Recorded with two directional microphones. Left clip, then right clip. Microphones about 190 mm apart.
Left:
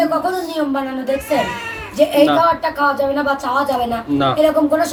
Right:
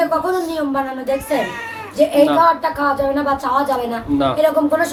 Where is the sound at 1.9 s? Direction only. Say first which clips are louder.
Even; 15° right (ahead or behind).